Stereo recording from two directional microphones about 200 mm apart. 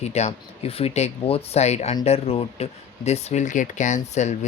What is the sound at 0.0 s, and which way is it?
Speech, 35° left (ahead or behind).